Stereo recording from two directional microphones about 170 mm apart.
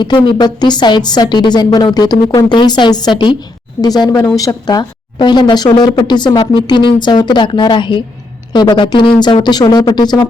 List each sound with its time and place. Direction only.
0.0 s a woman's voice: 25° left (ahead or behind)